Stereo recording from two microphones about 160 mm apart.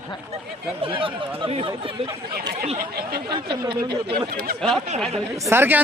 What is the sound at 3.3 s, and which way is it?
Speech, 30° right (ahead or behind).